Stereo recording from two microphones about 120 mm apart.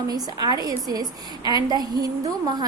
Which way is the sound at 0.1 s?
35° right (ahead or behind).